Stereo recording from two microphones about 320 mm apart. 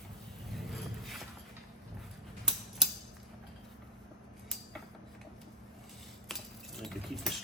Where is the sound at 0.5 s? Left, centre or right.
Centre.